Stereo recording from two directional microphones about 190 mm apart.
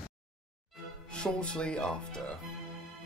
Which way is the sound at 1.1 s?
5° left (ahead or behind).